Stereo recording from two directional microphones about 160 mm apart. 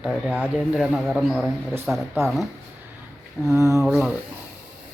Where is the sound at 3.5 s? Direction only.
20° right (ahead or behind).